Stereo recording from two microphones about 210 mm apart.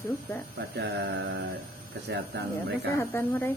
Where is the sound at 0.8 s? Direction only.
55° right (ahead or behind).